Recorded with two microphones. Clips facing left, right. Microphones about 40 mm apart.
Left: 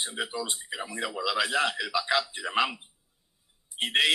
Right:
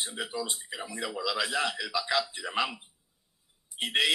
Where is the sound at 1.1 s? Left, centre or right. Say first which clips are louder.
Left 3 dB; centre.